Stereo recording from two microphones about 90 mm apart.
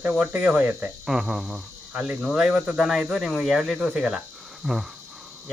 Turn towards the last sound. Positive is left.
turn(degrees=-5)  # may be behind; listen again after turning